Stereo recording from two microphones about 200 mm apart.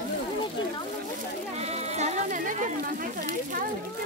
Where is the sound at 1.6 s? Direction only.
35° right (ahead or behind).